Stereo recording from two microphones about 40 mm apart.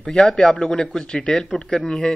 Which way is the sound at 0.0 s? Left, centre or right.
Centre.